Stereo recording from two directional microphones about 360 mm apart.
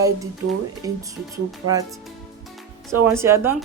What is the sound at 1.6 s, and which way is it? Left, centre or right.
Speech, right.